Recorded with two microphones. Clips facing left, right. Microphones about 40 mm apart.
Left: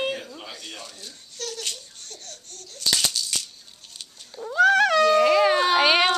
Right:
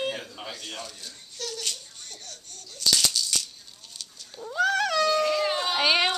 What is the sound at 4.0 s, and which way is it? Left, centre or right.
Cat, centre.